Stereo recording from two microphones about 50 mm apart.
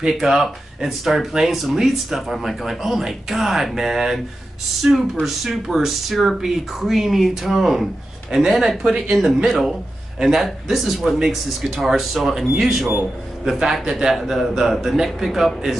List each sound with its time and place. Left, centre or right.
0.0 s speech: centre
4.8 s a man's voice: centre
5.2 s a man's voice: centre